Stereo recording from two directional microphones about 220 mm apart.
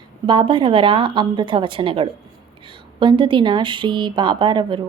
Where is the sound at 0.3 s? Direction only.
20° right (ahead or behind).